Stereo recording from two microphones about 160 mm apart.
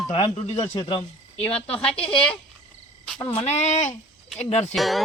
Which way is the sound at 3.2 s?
40° left (ahead or behind).